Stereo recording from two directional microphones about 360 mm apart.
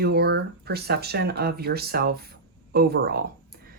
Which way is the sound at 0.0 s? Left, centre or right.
Right.